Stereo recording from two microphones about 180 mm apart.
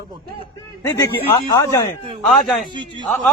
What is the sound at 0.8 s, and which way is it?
Speech, 15° left (ahead or behind).